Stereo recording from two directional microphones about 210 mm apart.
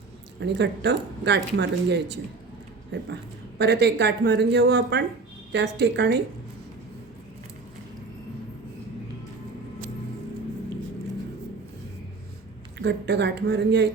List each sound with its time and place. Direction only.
0.3 s speech: 55° right (ahead or behind)
3.6 s a woman's voice: 55° right (ahead or behind)
12.8 s speech: 55° right (ahead or behind)